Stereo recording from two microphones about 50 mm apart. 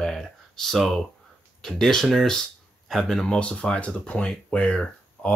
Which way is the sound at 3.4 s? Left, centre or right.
Left.